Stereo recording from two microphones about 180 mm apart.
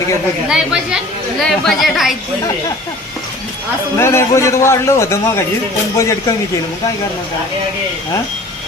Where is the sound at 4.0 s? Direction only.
15° left (ahead or behind).